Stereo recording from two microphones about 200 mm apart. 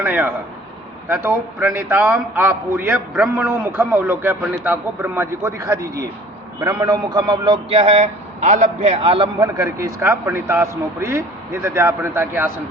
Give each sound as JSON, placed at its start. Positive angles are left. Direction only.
{"t": 0.0, "sound": "a man's voice", "side_deg": -10}